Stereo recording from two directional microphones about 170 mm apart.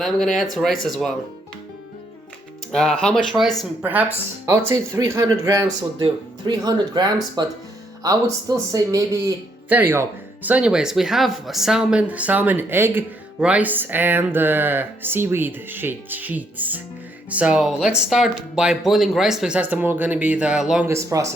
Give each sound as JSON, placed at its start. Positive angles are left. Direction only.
{"t": 0.0, "sound": "speech", "side_deg": 0}
{"t": 2.7, "sound": "speech", "side_deg": 5}
{"t": 3.8, "sound": "speech", "side_deg": -10}
{"t": 20.8, "sound": "speech", "side_deg": -15}